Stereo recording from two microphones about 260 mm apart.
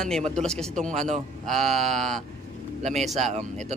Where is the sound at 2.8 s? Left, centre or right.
Right.